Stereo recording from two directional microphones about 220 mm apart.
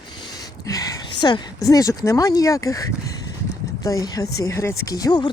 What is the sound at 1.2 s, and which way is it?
Speech, 15° left (ahead or behind).